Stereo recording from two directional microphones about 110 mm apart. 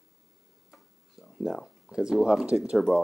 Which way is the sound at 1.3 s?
Centre (ahead or behind).